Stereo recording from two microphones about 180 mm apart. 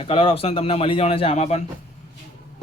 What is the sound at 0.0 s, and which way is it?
A man's voice, 30° left (ahead or behind).